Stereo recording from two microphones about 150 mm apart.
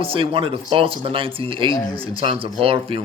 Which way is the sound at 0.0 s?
35° right (ahead or behind).